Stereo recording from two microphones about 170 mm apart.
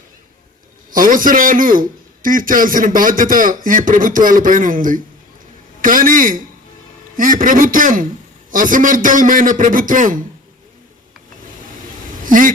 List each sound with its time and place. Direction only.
0.9 s a man's voice: 55° right (ahead or behind)
12.2 s speech: 50° right (ahead or behind)